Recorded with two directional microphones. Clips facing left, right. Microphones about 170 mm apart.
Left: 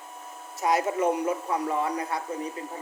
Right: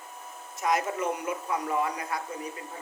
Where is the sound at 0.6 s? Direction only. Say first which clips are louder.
Left 3 dB; 35° left (ahead or behind).